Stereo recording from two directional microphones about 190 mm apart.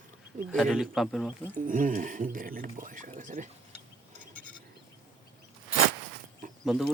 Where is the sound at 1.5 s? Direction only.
45° right (ahead or behind).